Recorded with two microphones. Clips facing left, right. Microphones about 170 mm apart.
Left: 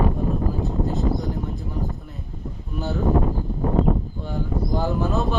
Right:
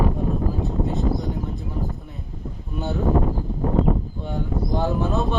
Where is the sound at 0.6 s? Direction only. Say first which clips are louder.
Even; centre (ahead or behind).